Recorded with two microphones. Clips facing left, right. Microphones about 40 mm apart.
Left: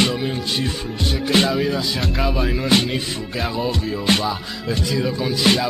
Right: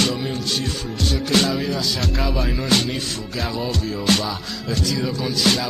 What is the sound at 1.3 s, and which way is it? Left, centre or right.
Music, centre.